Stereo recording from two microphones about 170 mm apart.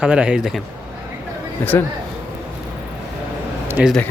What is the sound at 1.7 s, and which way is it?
Speech, 15° left (ahead or behind).